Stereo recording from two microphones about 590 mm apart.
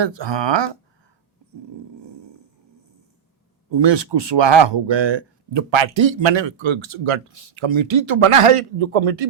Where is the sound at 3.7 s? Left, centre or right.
Right.